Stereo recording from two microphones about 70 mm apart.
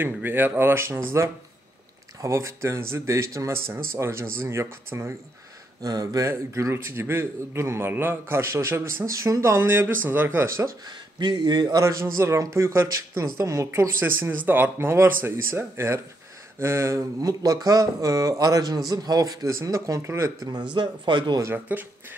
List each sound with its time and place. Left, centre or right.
0.0 s a man's voice: right
5.8 s speech: right
6.2 s a man's voice: right
11.1 s speech: right
11.8 s a man's voice: right
19.4 s speech: right
20.7 s speech: right
21.7 s speech: right